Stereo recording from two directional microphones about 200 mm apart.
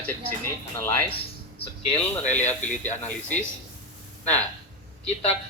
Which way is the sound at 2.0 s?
5° left (ahead or behind).